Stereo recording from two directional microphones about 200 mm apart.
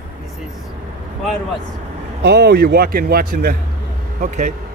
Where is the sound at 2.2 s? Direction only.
55° right (ahead or behind).